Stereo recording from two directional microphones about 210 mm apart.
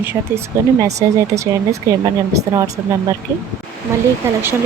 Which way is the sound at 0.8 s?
15° right (ahead or behind).